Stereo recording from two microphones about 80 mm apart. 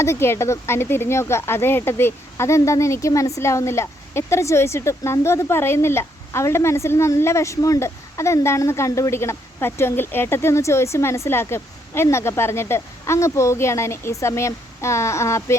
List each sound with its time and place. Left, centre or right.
0.0 s a woman's voice: left